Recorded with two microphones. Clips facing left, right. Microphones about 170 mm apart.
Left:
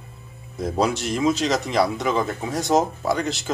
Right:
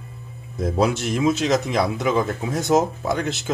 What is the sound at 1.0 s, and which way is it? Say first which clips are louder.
Speech: right 1 dB; centre (ahead or behind).